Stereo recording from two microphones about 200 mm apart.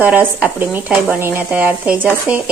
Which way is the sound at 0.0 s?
10° right (ahead or behind).